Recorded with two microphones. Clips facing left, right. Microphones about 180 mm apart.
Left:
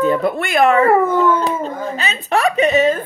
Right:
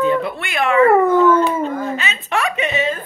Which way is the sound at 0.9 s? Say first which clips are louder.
Right 2 dB; centre (ahead or behind).